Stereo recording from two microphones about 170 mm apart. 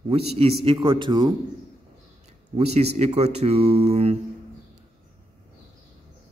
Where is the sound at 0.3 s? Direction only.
35° right (ahead or behind).